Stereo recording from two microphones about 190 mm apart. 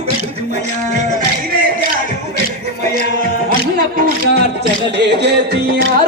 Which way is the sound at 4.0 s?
60° right (ahead or behind).